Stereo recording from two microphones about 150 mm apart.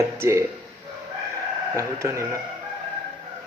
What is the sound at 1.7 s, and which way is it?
Speech, 20° right (ahead or behind).